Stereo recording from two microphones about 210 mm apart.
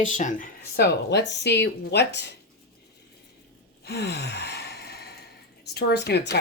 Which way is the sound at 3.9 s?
50° left (ahead or behind).